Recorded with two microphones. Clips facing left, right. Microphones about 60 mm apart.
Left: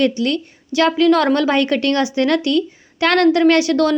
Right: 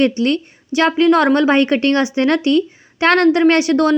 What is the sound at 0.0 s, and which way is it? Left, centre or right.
A woman's voice, right.